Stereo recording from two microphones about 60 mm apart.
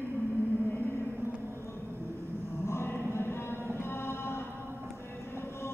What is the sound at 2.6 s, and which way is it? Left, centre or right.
Music, left.